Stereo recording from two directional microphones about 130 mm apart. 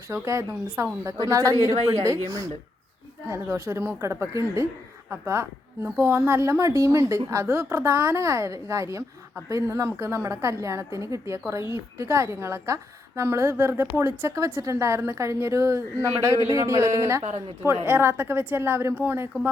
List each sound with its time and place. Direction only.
0.1 s a woman's voice: 25° right (ahead or behind)
3.2 s a woman's voice: 20° right (ahead or behind)